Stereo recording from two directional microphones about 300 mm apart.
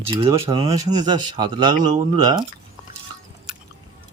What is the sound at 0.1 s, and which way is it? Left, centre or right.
A man's voice, centre.